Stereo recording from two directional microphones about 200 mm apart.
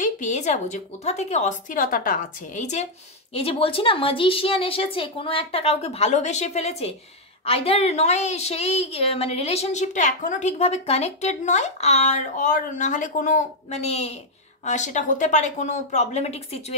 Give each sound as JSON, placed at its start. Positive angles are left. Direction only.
{"t": 0.0, "sound": "a woman's voice", "side_deg": 35}